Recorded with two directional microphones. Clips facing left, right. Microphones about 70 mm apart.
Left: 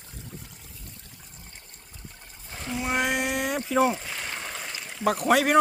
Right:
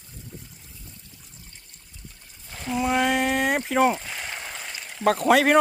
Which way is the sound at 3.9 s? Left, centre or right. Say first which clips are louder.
Right 1 dB; centre.